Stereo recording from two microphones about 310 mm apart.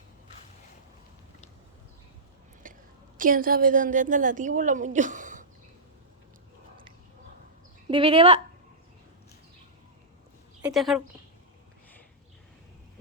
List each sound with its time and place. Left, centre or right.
2.6 s a sound: right
3.2 s a woman's voice: right
7.9 s speech: centre
10.6 s speech: centre